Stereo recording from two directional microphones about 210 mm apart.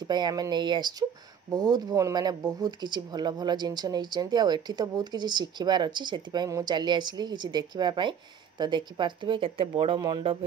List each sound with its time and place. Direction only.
0.0 s speech: 20° right (ahead or behind)